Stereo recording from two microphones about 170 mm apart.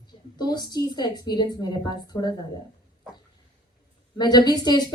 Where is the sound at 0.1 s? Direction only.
25° left (ahead or behind).